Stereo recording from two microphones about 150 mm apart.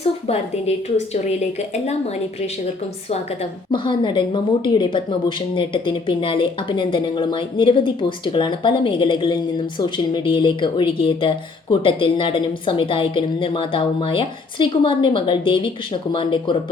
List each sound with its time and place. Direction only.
0.0 s a woman's voice: 45° left (ahead or behind)
3.7 s a woman's voice: 30° left (ahead or behind)